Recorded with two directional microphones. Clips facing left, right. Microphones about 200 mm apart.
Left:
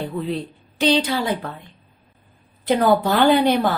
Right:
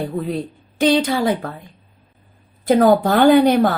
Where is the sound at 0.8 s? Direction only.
50° right (ahead or behind).